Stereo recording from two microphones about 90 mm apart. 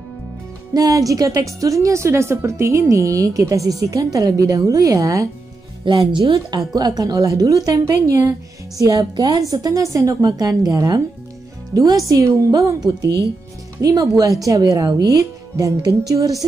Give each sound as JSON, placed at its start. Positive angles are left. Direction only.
{"t": 0.7, "sound": "a woman's voice", "side_deg": -40}
{"t": 5.9, "sound": "speech", "side_deg": -65}
{"t": 6.7, "sound": "a woman's voice", "side_deg": -45}
{"t": 9.1, "sound": "speech", "side_deg": -55}
{"t": 9.4, "sound": "a woman's voice", "side_deg": -40}